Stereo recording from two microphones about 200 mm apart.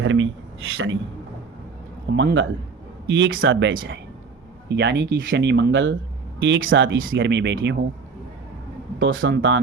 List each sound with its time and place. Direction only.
0.0 s speech: 80° right
2.0 s speech: 60° right (ahead or behind)
9.0 s speech: 75° right (ahead or behind)